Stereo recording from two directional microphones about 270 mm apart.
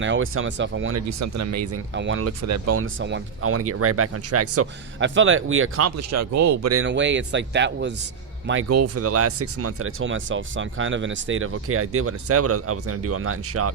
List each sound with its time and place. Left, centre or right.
0.0 s speech: right
1.2 s speech: right
1.9 s speech: right
2.4 s speech: right
3.0 s speech: right
6.8 s speech: right
8.7 s speech: right